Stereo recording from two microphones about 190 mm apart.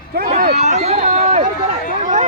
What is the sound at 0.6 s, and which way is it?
Speech, 35° right (ahead or behind).